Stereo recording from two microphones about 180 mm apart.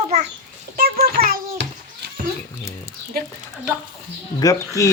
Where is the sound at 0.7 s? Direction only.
55° right (ahead or behind).